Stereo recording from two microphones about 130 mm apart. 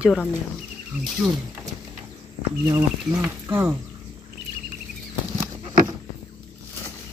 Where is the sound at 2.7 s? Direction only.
15° right (ahead or behind).